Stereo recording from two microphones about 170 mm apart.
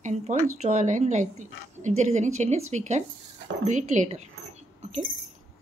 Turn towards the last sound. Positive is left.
turn(degrees=-40)  # may be behind; listen again after turning